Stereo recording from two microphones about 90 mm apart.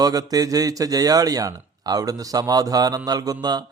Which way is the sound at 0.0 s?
45° right (ahead or behind).